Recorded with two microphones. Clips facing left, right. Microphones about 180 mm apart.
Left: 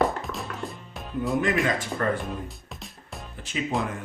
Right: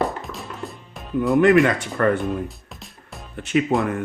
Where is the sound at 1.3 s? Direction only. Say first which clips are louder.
Right 10 dB; 65° right (ahead or behind).